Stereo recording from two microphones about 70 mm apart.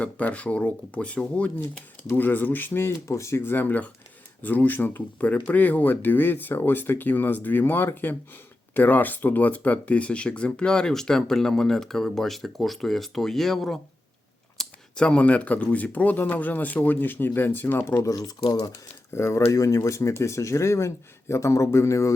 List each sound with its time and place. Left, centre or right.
0.0 s speech: centre
18.0 s speech: left
19.1 s speech: left